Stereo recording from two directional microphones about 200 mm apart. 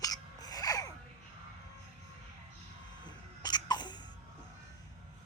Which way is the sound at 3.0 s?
20° left (ahead or behind).